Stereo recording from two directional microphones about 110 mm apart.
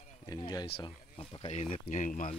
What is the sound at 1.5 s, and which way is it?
Speech, 80° left.